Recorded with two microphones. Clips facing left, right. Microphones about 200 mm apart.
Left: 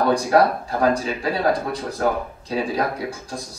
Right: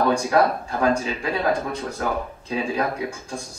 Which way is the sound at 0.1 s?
35° left (ahead or behind).